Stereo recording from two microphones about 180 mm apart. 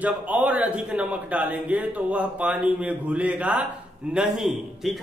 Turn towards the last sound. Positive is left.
turn(degrees=0)  # may be behind; listen again after turning